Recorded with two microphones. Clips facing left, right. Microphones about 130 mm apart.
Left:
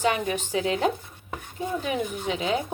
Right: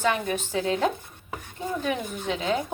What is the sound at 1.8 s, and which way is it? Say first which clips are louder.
Speech: even; 10° left (ahead or behind).